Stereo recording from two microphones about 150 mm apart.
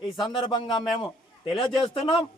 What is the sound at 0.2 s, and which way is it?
A man's voice, 30° left (ahead or behind).